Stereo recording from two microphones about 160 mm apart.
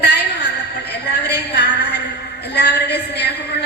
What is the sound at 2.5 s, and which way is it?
Speech, 90° left.